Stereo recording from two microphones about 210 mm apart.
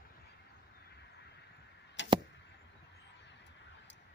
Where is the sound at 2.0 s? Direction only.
60° left (ahead or behind).